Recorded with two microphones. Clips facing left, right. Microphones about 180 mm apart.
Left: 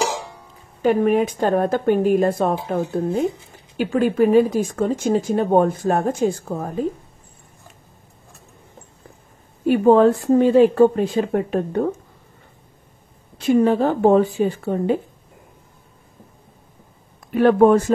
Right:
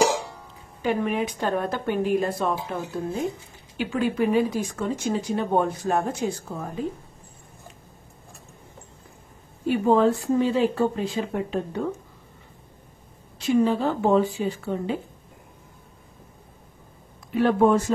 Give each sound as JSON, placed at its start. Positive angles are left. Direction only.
{"t": 0.8, "sound": "a woman's voice", "side_deg": 45}
{"t": 9.7, "sound": "speech", "side_deg": 55}
{"t": 13.4, "sound": "a woman's voice", "side_deg": 55}
{"t": 17.3, "sound": "speech", "side_deg": 60}